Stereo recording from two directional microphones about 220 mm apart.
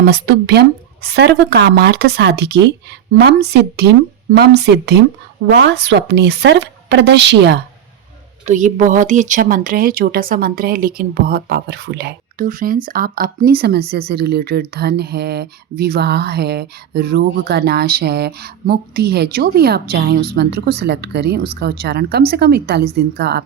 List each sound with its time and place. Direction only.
0.0 s speech: 50° right (ahead or behind)
8.4 s speech: 35° right (ahead or behind)